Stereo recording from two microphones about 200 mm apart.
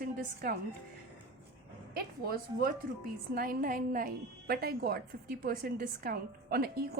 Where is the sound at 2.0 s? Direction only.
50° right (ahead or behind).